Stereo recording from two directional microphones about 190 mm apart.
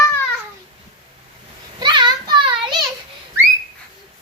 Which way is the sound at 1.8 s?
25° right (ahead or behind).